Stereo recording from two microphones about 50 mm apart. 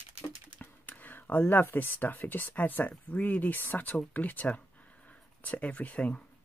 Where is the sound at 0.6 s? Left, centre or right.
Left.